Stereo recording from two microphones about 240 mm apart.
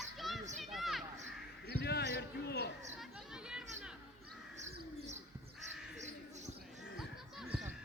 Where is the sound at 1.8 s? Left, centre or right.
Left.